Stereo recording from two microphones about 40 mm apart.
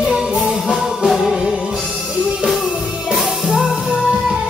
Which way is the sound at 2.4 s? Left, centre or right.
Centre.